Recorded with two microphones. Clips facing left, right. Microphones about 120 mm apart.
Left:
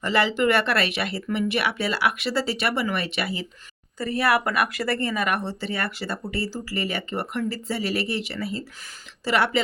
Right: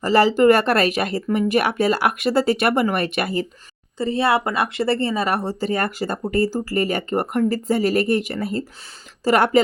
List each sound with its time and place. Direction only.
0.0 s speech: 40° right (ahead or behind)
3.9 s speech: 25° right (ahead or behind); by 9.6 s 45° right (ahead or behind)